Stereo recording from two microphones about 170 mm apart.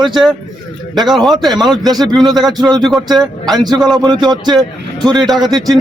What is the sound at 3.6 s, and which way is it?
Speech, centre (ahead or behind).